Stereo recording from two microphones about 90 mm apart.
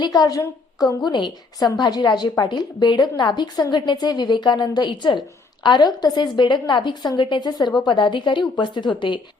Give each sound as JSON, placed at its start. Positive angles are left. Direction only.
{"t": 0.0, "sound": "a woman's voice", "side_deg": 45}